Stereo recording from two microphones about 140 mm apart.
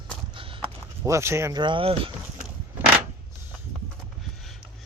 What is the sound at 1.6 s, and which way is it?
Speech, 40° right (ahead or behind).